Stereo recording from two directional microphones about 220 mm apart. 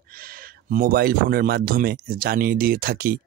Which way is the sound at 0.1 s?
40° right (ahead or behind).